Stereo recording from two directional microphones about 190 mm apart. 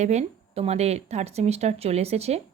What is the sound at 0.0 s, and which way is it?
A woman's voice, 35° right (ahead or behind).